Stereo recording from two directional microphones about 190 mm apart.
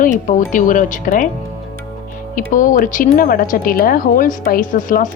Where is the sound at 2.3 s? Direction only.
45° left (ahead or behind).